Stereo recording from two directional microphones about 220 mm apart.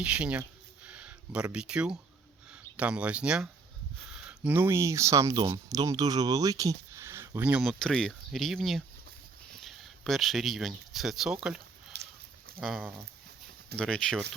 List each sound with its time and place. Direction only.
0.0 s speech: 5° right (ahead or behind)
11.9 s a sound: 50° right (ahead or behind)
12.5 s speech: 5° right (ahead or behind)